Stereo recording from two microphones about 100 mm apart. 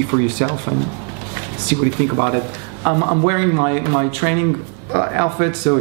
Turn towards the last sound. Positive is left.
turn(degrees=-20)  # may be behind; listen again after turning